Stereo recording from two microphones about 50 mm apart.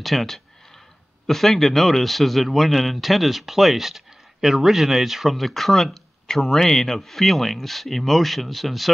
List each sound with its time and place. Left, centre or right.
0.0 s speech: centre